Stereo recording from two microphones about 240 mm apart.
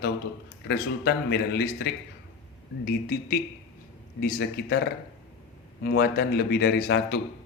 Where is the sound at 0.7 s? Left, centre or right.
Left.